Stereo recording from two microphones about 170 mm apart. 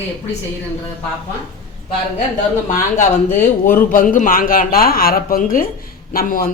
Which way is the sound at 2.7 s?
45° left (ahead or behind).